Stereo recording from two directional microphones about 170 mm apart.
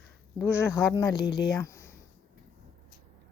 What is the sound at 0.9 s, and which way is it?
Speech, 25° left (ahead or behind).